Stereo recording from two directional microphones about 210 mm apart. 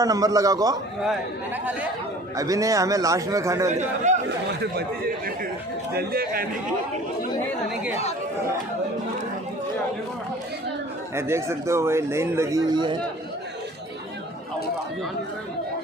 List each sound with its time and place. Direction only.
0.0 s a man's voice: 15° right (ahead or behind)
2.3 s a man's voice: 15° right (ahead or behind)
3.7 s a man's voice: 35° right (ahead or behind)
4.6 s speech: 45° right (ahead or behind)
11.1 s a man's voice: 10° right (ahead or behind)